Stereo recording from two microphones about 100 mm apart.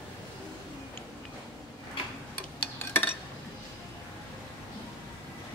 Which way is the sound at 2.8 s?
20° left (ahead or behind).